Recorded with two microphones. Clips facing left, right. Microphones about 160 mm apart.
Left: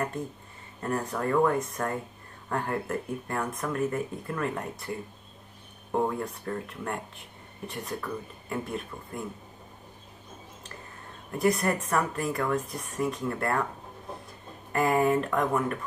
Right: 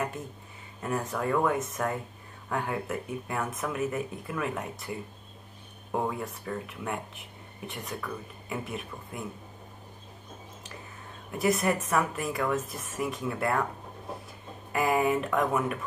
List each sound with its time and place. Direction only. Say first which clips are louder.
0.8 s speech: left 1 dB; centre (ahead or behind)
11.3 s speech: left 1 dB; centre (ahead or behind)
14.7 s speech: left 2 dB; centre (ahead or behind)